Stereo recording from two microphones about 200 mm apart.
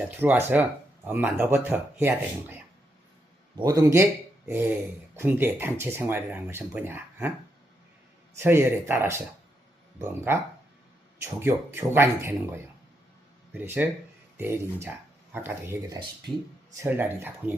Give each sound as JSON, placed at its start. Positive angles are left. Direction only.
{"t": 0.2, "sound": "speech", "side_deg": -10}
{"t": 3.6, "sound": "speech", "side_deg": -15}
{"t": 8.4, "sound": "speech", "side_deg": -10}
{"t": 11.2, "sound": "speech", "side_deg": -10}